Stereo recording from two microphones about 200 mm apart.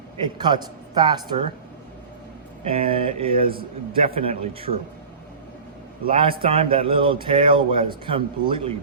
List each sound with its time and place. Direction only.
0.3 s speech: 20° right (ahead or behind)
2.6 s speech: 30° right (ahead or behind)
6.1 s speech: 25° right (ahead or behind)